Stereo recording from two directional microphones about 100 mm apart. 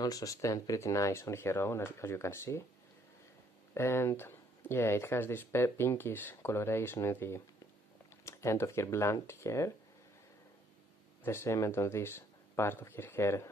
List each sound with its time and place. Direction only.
0.0 s speech: 35° left (ahead or behind)
3.7 s speech: 25° left (ahead or behind)
11.2 s speech: 25° left (ahead or behind)